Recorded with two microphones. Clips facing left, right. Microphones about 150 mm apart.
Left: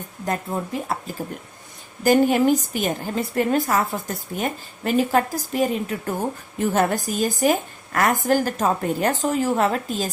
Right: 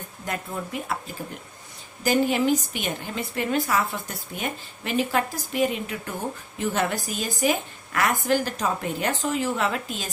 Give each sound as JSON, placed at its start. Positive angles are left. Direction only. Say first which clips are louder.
{"t": 0.3, "sound": "a woman's voice", "louder": "left 5 dB", "side_deg": 40}